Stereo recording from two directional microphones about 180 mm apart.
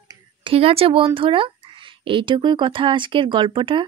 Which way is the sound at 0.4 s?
30° right (ahead or behind).